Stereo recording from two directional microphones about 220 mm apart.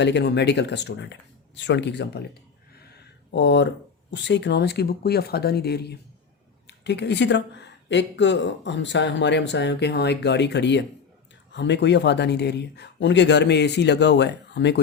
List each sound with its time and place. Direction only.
0.0 s speech: 50° left (ahead or behind)
3.3 s speech: 55° left (ahead or behind)